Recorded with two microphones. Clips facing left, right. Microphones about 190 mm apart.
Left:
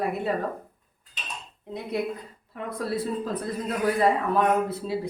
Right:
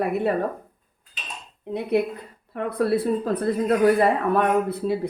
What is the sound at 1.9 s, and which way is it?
Speech, 60° right (ahead or behind).